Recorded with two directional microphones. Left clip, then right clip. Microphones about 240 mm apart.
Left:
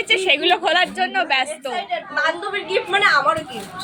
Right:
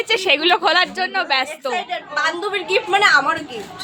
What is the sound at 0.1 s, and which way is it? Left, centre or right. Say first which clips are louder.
A woman's voice: even; right.